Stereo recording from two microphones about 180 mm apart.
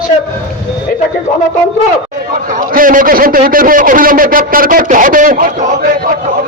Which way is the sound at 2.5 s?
50° right (ahead or behind).